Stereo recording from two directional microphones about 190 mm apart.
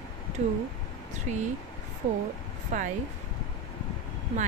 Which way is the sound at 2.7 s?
40° right (ahead or behind).